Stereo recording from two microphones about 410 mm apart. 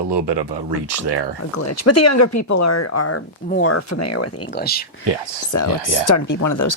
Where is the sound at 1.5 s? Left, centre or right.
Left.